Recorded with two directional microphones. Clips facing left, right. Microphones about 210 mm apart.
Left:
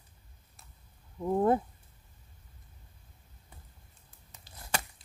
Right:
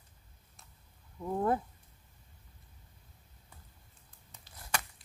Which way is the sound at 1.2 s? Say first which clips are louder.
Left 5 dB; 25° left (ahead or behind).